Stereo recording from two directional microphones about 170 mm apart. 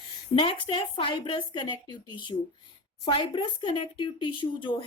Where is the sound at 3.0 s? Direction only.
30° left (ahead or behind).